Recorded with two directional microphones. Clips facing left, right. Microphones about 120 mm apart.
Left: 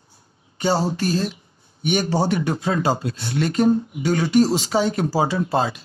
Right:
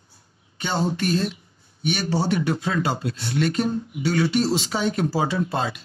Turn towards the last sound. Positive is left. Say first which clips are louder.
# left 3 dB
turn(degrees=35)  # may be behind; listen again after turning